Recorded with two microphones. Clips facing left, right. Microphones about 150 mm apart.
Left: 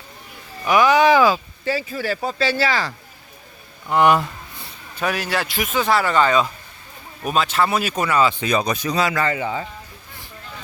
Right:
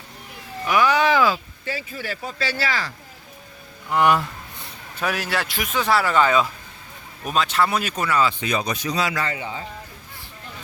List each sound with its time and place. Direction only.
0.7 s a sound: 15° left (ahead or behind)
1.6 s speech: 35° left (ahead or behind)
3.9 s speech: 20° left (ahead or behind)
4.9 s speech: centre (ahead or behind)
7.9 s speech: 15° left (ahead or behind)
8.4 s speech: 40° left (ahead or behind); by 9.6 s 65° left (ahead or behind)